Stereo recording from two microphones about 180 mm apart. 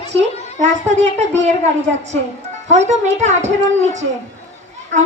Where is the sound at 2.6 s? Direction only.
40° right (ahead or behind).